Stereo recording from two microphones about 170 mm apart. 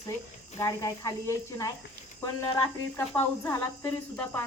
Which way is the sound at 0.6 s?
20° left (ahead or behind).